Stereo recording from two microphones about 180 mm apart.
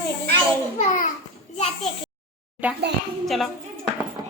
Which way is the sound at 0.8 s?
45° left (ahead or behind).